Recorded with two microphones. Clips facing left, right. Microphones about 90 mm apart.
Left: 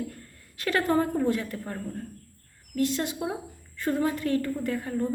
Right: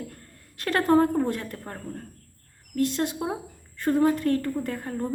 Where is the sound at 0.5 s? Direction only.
45° right (ahead or behind).